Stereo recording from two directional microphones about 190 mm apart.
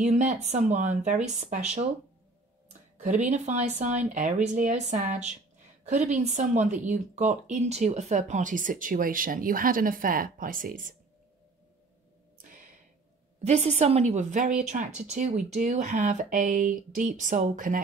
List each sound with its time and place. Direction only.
0.0 s speech: 40° right (ahead or behind)
3.0 s speech: 40° right (ahead or behind)
12.4 s a sound: 45° right (ahead or behind)
13.4 s speech: 35° right (ahead or behind)